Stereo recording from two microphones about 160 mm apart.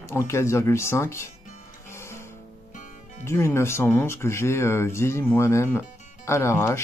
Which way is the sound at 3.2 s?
15° left (ahead or behind).